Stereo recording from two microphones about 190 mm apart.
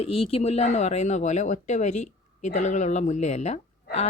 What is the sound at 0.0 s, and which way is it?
A woman's voice, 30° left (ahead or behind).